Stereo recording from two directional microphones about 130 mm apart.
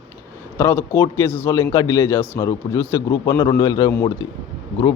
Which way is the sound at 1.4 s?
25° left (ahead or behind).